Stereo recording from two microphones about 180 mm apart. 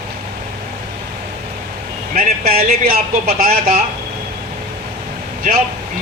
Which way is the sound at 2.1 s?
55° right (ahead or behind).